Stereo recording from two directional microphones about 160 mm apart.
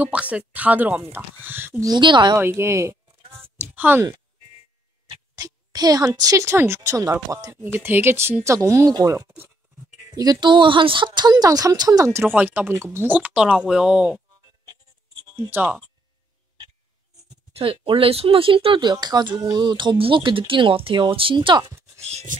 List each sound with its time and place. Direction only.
0.0 s speech: 10° right (ahead or behind); by 2.3 s 30° right (ahead or behind)
2.3 s speech: 15° right (ahead or behind)
3.3 s a sound: 15° right (ahead or behind)
5.1 s speech: 20° right (ahead or behind); by 14.2 s 5° right (ahead or behind)
15.3 s speech: 15° right (ahead or behind)
17.6 s speech: 35° right (ahead or behind)
22.1 s a sound: 50° right (ahead or behind)